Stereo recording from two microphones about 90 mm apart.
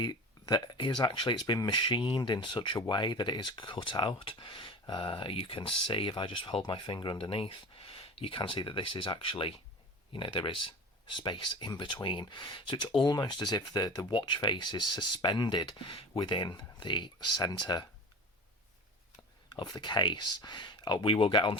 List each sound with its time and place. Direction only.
0.0 s a sound: 50° left (ahead or behind)
0.6 s speech: 60° left (ahead or behind); by 9.6 s 85° left
10.1 s speech: 70° left (ahead or behind)
11.2 s speech: 60° left (ahead or behind)
14.1 s speech: 60° left (ahead or behind)
15.9 s speech: 65° left (ahead or behind)
19.5 s speech: 55° left (ahead or behind); by 21.6 s 70° left (ahead or behind)